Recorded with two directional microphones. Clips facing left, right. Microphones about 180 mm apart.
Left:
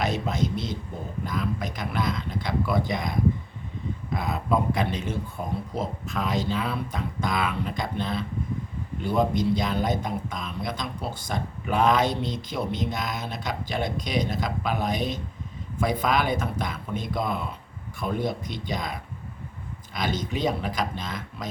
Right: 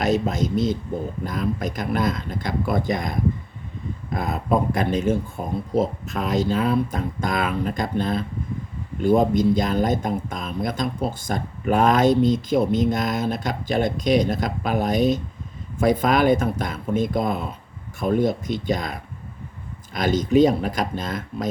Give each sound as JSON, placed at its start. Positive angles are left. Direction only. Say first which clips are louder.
{"t": 0.0, "sound": "speech", "louder": "right 5 dB", "side_deg": -45}